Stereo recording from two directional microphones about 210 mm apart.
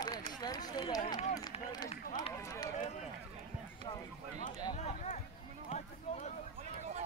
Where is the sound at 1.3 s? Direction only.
20° left (ahead or behind).